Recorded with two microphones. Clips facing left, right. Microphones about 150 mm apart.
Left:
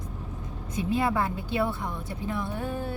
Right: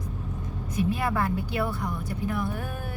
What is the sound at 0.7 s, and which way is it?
Speech, 25° left (ahead or behind).